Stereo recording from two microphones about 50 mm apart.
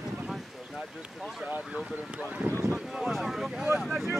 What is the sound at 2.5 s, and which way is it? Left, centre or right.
Boat, left.